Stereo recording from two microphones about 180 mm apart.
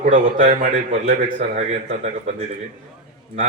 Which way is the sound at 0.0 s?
50° right (ahead or behind).